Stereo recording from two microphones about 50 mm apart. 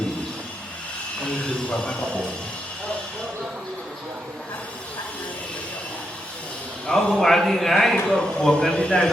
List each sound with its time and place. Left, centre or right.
1.7 s a man's voice: left
6.8 s a man's voice: centre